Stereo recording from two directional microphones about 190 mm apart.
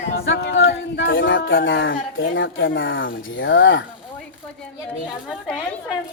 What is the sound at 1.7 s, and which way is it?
Speech, 80° left.